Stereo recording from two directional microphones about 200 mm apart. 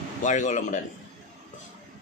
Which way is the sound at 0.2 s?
40° left (ahead or behind).